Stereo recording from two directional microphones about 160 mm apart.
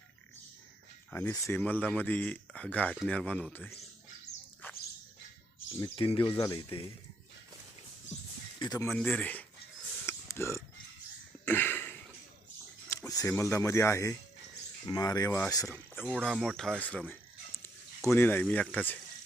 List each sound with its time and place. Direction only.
1.1 s speech: 15° left (ahead or behind)
5.6 s speech: 35° left (ahead or behind)
8.5 s speech: 25° left (ahead or behind)
9.0 s speech: 5° left (ahead or behind)
10.1 s a sound: 15° left (ahead or behind)
12.9 s speech: 20° left (ahead or behind)
16.0 s speech: 5° right (ahead or behind)